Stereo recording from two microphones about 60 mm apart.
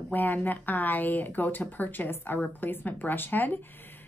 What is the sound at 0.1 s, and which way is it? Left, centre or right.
A woman's voice, left.